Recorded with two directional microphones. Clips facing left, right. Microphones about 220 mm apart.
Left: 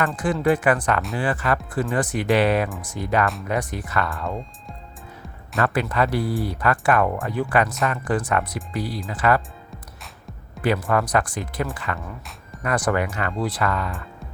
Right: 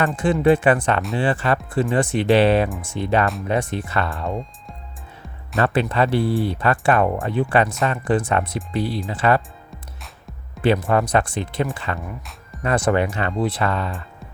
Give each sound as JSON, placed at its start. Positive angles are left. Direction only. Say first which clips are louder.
{"t": 0.4, "sound": "speech", "louder": "right 3 dB", "side_deg": -25}
{"t": 5.6, "sound": "speech", "louder": "right 3 dB", "side_deg": -25}
{"t": 10.6, "sound": "speech", "louder": "right 3 dB", "side_deg": -25}